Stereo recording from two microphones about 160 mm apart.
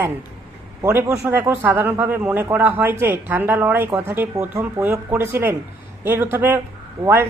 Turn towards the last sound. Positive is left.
turn(degrees=-15)  # may be behind; listen again after turning